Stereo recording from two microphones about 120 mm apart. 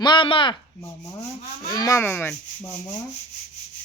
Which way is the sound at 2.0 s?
20° left (ahead or behind).